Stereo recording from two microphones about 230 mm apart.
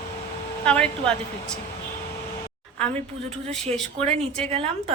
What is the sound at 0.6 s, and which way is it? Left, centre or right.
Speech, centre.